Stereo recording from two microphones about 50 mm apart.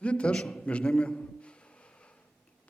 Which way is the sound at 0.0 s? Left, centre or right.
Left.